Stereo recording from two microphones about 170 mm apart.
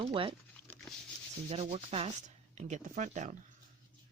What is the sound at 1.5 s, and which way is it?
Speech, 35° right (ahead or behind).